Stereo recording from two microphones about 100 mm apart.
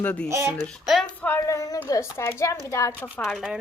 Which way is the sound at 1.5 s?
35° left (ahead or behind).